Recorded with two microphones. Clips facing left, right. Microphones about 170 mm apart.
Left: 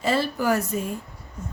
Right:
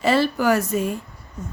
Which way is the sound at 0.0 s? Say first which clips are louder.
Right 4 dB; 85° right.